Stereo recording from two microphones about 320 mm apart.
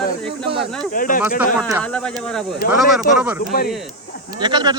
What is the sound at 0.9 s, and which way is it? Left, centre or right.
Speech, left.